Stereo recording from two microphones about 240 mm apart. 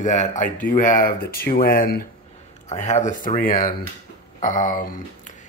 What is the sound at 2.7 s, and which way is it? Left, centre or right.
Speech, left.